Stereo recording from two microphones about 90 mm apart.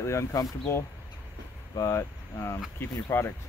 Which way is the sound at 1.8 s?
30° left (ahead or behind).